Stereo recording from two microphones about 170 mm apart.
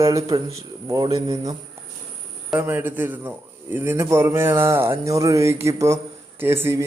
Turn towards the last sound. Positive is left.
turn(degrees=-15)  # may be behind; listen again after turning